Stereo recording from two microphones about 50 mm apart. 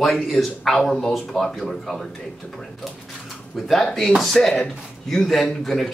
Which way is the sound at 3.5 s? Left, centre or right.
Centre.